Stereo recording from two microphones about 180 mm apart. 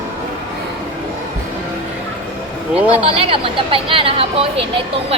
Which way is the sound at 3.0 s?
30° right (ahead or behind).